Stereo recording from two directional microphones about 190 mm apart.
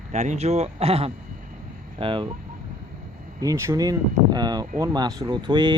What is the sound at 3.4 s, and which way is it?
Speech, 15° right (ahead or behind).